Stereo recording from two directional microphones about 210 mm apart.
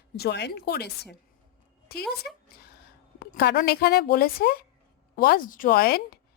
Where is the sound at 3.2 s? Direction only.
50° left (ahead or behind).